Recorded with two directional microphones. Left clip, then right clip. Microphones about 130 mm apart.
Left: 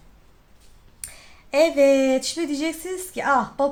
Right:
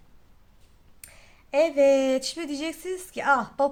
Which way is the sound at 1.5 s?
15° right (ahead or behind).